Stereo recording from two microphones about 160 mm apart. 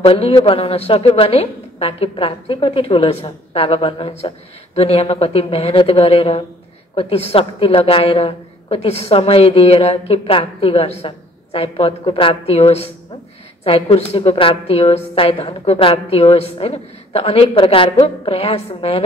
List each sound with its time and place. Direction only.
0.0 s a woman's voice: 35° left (ahead or behind)